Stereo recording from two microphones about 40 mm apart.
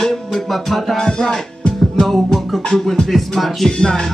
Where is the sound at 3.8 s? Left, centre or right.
Centre.